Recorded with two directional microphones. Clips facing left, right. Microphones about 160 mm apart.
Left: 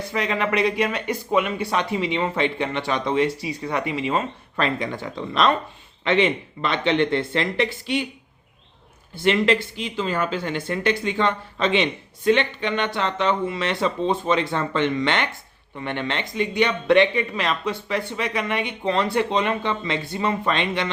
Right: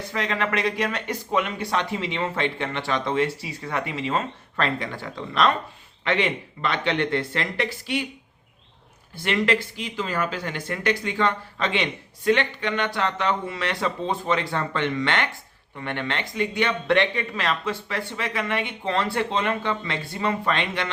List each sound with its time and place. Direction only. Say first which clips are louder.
0.1 s speech: left 2 dB; 15° left (ahead or behind)
9.2 s speech: left 4 dB; 25° left (ahead or behind)